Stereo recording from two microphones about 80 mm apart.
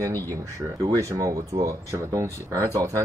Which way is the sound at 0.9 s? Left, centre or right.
Right.